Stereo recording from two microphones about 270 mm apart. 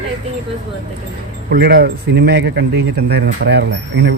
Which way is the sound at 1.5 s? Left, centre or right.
Right.